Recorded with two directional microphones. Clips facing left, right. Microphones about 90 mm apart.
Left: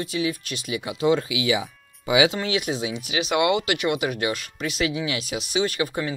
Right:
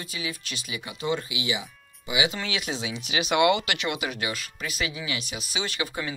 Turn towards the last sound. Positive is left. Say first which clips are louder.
# left 5 dB
turn(degrees=40)  # may be behind; listen again after turning